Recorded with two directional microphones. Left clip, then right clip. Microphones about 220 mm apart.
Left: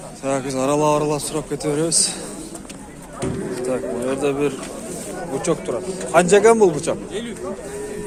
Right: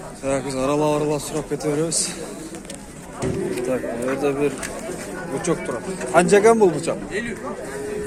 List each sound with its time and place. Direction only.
0.3 s speech: 5° left (ahead or behind)
3.7 s speech: 5° left (ahead or behind)